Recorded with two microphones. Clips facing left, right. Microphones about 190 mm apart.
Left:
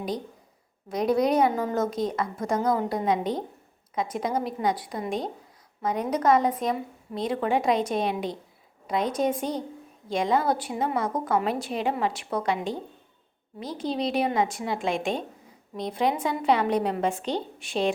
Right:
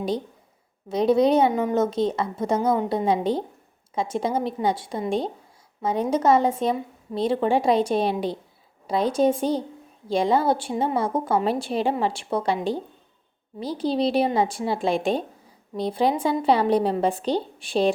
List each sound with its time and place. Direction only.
0.9 s a woman's voice: 25° right (ahead or behind)